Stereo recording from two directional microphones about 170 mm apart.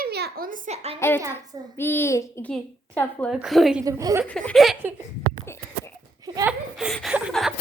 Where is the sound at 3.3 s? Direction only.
Centre (ahead or behind).